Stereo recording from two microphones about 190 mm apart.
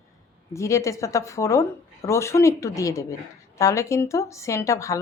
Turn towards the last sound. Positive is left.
turn(degrees=15)  # may be behind; listen again after turning